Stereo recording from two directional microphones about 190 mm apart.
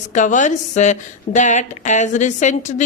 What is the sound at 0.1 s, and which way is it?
A woman's voice, 40° left (ahead or behind).